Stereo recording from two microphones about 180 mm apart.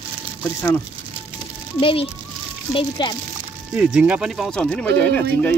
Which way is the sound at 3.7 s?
5° right (ahead or behind).